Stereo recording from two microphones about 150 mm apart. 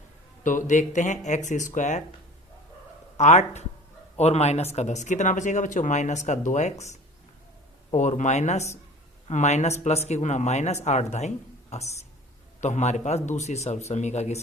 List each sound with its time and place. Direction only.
0.4 s speech: 60° left (ahead or behind)
3.2 s speech: 50° left (ahead or behind)